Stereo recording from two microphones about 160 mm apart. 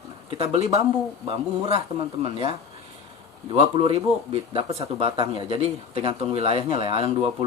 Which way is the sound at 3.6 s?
35° right (ahead or behind).